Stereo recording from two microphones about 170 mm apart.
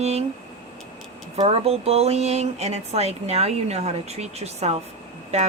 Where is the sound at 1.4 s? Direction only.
35° right (ahead or behind).